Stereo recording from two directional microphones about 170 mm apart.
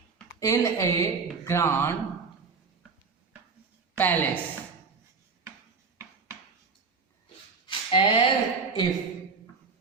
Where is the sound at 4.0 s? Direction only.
10° left (ahead or behind).